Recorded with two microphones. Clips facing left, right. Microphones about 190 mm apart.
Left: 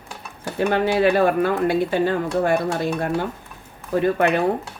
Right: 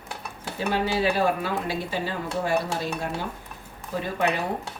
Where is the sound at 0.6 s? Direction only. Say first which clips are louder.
Left 6 dB; 55° left (ahead or behind).